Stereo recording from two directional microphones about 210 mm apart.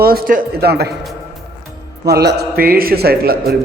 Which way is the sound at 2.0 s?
50° right (ahead or behind).